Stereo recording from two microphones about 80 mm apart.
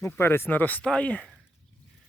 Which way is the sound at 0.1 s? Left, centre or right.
Left.